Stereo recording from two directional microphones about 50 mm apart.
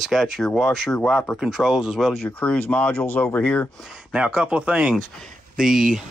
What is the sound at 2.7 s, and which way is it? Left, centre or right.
Speech, left.